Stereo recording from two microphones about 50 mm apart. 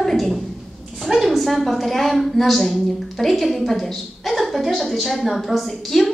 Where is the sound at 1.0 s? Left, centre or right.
Centre.